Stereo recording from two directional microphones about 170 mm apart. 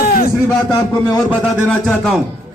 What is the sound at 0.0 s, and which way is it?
Music, 55° left (ahead or behind).